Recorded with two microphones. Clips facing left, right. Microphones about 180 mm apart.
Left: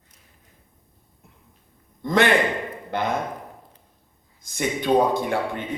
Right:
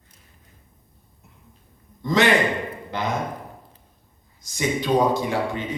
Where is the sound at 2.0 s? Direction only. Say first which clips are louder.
Even; 55° left (ahead or behind).